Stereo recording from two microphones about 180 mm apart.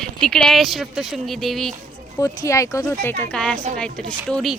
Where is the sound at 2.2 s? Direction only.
15° left (ahead or behind).